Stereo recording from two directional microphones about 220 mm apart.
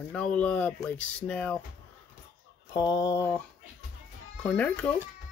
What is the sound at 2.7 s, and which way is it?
Speech, 20° left (ahead or behind).